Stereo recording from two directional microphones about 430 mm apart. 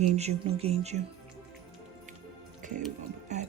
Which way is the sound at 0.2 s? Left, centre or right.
Centre.